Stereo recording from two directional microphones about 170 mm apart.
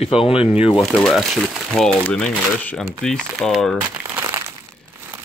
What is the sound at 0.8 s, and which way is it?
Speech, centre (ahead or behind).